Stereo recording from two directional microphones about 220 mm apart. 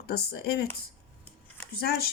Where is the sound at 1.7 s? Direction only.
45° left (ahead or behind).